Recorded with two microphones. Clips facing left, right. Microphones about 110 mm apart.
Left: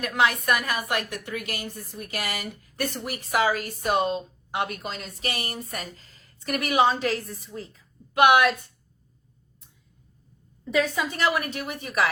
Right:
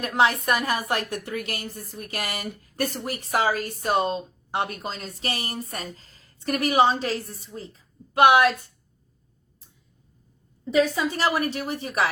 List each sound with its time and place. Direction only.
0.0 s speech: 30° right (ahead or behind)
10.8 s speech: 30° right (ahead or behind)